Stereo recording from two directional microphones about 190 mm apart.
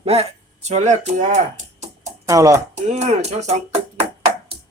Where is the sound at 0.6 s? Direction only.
35° right (ahead or behind).